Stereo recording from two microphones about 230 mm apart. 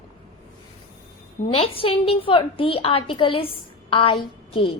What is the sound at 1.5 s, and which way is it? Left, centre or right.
A woman's voice, left.